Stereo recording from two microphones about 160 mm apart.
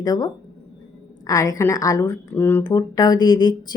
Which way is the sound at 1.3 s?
20° left (ahead or behind).